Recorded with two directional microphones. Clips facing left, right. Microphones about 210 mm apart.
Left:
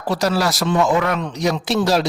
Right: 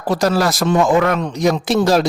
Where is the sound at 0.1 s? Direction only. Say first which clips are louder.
Right 3 dB; 50° right (ahead or behind).